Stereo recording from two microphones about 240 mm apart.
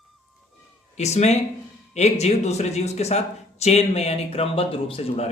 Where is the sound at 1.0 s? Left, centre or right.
Left.